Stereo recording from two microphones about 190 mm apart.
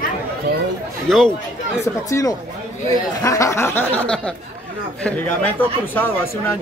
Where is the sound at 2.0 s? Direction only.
15° left (ahead or behind).